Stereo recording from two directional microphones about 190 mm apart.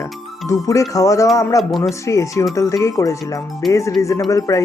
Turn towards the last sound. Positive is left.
turn(degrees=15)  # may be behind; listen again after turning